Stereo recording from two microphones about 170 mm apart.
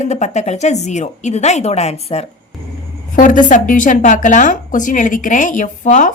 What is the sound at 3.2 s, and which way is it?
A woman's voice, 50° left (ahead or behind).